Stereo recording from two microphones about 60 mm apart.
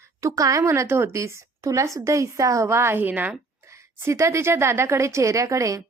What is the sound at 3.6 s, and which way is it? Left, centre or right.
A woman's voice, right.